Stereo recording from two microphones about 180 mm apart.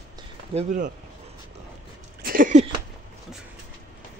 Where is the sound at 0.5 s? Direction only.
45° right (ahead or behind).